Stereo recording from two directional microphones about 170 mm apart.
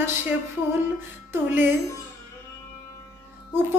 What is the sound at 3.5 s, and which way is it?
Speech, 15° right (ahead or behind).